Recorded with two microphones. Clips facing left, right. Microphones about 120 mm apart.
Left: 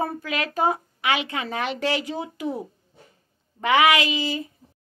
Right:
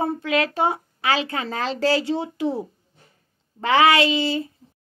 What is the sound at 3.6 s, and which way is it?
Speech, 30° right (ahead or behind).